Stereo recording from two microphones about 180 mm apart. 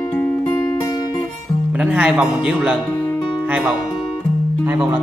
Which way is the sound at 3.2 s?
5° right (ahead or behind).